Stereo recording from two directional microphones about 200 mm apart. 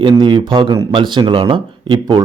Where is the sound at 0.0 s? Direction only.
25° right (ahead or behind).